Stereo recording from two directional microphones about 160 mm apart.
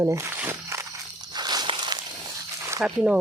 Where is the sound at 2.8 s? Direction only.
5° right (ahead or behind).